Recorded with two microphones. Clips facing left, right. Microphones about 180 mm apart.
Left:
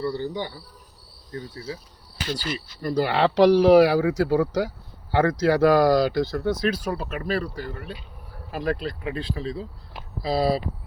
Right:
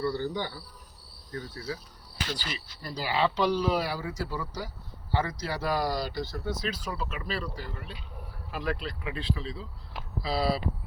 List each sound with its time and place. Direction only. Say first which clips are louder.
0.0 s speech: left 2 dB; 20° left (ahead or behind)
2.5 s speech: left 11 dB; 55° left (ahead or behind)